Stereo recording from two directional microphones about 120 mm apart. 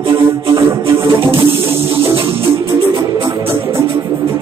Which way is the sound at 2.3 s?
20° right (ahead or behind).